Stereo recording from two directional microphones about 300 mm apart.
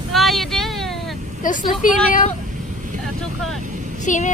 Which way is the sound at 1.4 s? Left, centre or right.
Left.